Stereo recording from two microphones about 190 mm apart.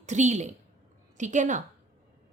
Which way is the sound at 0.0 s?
40° right (ahead or behind).